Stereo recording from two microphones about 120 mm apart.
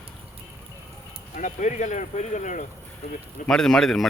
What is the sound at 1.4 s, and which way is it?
Speech, 90° left.